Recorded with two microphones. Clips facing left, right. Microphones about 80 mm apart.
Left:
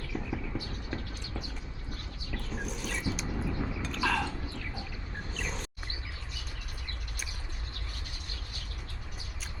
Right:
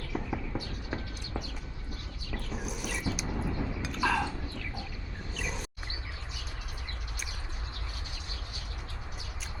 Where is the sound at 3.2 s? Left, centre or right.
Right.